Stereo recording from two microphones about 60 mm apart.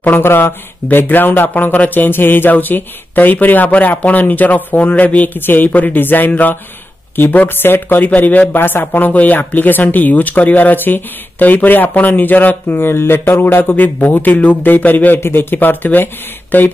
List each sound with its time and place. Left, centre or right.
0.0 s speech: left
15.1 s speech: left